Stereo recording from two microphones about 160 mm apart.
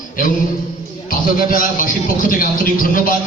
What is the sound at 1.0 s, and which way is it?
A man's voice, 60° left (ahead or behind).